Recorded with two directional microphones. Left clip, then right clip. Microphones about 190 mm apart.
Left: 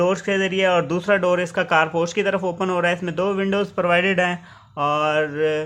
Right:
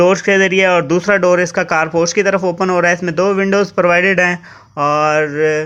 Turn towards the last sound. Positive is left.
turn(degrees=-15)  # may be behind; listen again after turning